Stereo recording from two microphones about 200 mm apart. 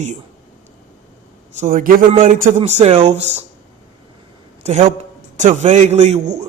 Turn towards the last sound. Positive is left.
turn(degrees=-35)  # may be behind; listen again after turning